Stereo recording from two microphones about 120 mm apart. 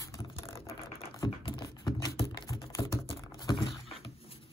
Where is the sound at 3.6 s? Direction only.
45° left (ahead or behind).